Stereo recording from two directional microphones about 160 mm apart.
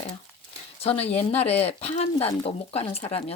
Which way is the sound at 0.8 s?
40° left (ahead or behind).